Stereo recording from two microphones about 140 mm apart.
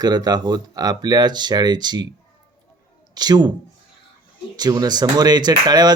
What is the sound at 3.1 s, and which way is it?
Speech, 30° right (ahead or behind).